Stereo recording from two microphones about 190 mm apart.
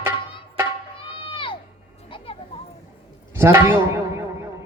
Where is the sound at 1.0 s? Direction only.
25° left (ahead or behind).